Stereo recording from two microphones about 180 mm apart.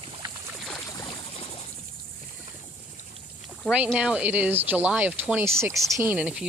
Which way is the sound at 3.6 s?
5° right (ahead or behind).